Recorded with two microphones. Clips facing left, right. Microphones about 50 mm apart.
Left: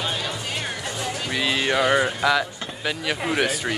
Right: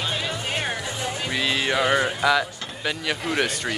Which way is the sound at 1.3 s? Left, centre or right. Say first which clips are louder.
Left 1 dB; centre.